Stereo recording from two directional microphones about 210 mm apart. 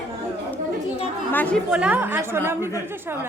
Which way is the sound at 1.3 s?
10° left (ahead or behind).